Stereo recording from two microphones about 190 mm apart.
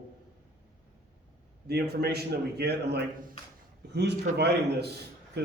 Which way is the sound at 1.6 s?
55° right (ahead or behind).